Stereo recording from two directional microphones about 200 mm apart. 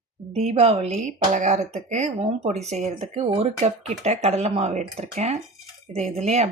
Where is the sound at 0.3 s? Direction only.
30° right (ahead or behind).